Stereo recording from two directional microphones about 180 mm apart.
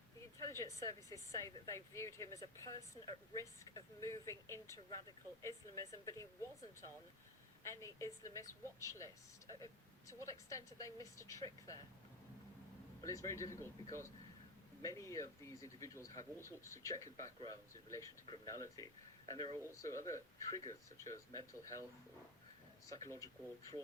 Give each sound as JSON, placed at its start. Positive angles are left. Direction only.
{"t": 0.3, "sound": "speech", "side_deg": 15}
{"t": 7.6, "sound": "speech", "side_deg": 15}
{"t": 13.0, "sound": "speech", "side_deg": 20}
{"t": 22.9, "sound": "speech", "side_deg": 15}